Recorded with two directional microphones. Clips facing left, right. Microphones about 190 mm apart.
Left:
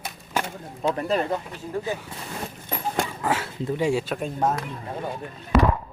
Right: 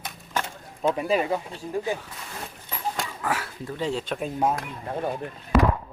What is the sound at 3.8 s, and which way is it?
Speech, 10° left (ahead or behind).